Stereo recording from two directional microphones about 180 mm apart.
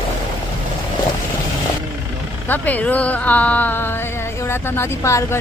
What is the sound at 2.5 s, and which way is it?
Speech, 10° left (ahead or behind).